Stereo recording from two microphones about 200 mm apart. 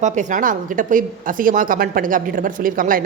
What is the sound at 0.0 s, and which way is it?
A woman's voice, 40° right (ahead or behind).